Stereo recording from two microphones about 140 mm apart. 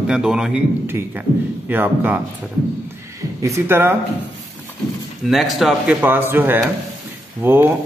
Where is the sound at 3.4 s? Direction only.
20° right (ahead or behind).